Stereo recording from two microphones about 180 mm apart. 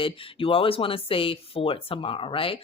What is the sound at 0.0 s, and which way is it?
Speech, 30° left (ahead or behind).